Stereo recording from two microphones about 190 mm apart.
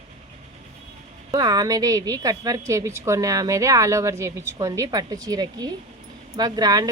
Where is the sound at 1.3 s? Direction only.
20° right (ahead or behind).